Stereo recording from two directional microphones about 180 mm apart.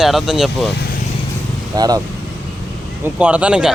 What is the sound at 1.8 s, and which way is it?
Speech, 20° right (ahead or behind).